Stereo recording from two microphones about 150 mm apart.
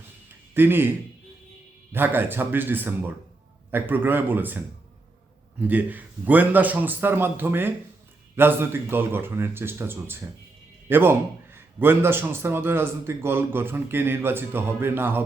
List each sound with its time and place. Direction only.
0.5 s a man's voice: 15° right (ahead or behind)
1.9 s a man's voice: 15° right (ahead or behind)